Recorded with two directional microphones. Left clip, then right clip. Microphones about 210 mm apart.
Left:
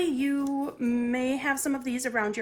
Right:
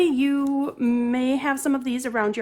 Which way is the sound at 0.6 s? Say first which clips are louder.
Right 5 dB; 45° right (ahead or behind).